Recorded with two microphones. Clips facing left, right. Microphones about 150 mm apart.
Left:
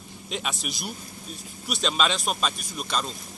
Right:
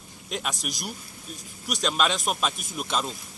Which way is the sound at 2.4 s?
15° right (ahead or behind).